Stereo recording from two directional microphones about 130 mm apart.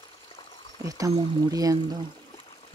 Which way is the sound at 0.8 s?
30° right (ahead or behind).